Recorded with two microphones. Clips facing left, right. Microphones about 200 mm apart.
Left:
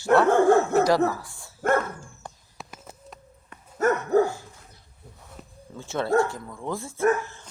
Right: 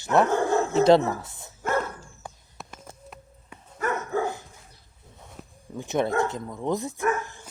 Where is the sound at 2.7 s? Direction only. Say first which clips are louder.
Even; 5° left (ahead or behind).